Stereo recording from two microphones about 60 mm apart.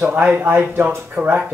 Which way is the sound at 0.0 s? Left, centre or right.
Right.